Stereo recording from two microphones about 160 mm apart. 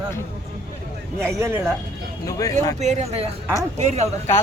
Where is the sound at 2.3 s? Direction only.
20° left (ahead or behind).